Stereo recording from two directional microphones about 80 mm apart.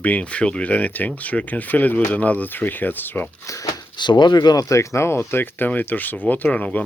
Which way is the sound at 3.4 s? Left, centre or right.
Left.